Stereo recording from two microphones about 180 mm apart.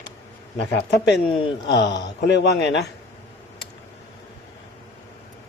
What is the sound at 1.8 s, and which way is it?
Speech, 75° left (ahead or behind).